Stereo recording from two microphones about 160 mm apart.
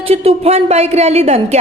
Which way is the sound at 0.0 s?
40° right (ahead or behind).